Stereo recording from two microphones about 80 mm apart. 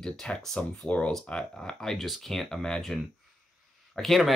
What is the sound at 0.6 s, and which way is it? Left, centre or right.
Speech, centre.